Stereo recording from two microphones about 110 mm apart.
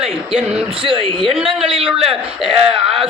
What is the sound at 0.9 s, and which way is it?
A man's voice, 55° right (ahead or behind).